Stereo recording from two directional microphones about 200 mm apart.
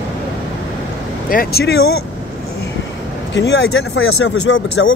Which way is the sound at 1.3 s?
50° left (ahead or behind).